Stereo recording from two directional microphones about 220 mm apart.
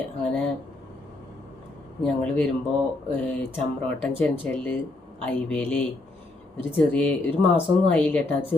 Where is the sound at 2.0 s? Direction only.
5° left (ahead or behind).